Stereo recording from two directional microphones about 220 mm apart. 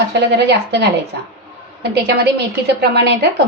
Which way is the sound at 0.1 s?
50° right (ahead or behind).